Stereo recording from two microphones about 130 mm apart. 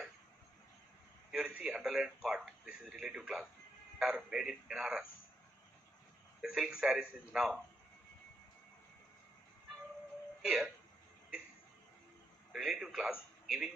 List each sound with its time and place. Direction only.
1.3 s a sound: 5° right (ahead or behind)
4.0 s speech: 5° right (ahead or behind)
6.4 s speech: 5° right (ahead or behind)
10.4 s speech: 5° right (ahead or behind)
12.5 s a man's voice: 5° right (ahead or behind)